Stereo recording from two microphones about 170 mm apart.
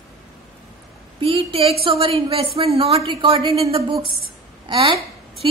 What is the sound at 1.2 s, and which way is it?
A woman's voice, 30° right (ahead or behind).